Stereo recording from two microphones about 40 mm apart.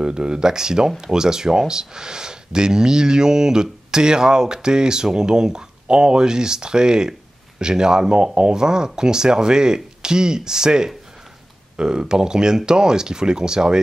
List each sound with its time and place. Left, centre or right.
0.0 s speech: right